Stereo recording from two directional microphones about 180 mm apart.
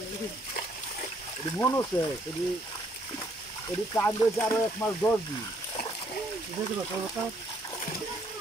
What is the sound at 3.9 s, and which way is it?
Frying, 10° left (ahead or behind).